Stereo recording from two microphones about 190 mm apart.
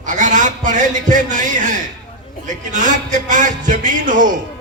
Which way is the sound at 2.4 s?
40° right (ahead or behind).